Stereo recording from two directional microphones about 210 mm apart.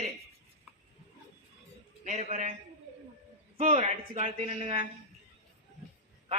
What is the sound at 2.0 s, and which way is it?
Speech, 35° right (ahead or behind).